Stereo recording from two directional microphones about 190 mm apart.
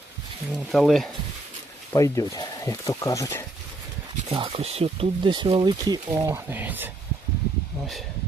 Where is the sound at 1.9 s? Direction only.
20° left (ahead or behind).